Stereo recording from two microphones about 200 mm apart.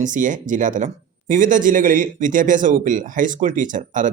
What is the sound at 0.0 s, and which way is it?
Speech, 40° right (ahead or behind).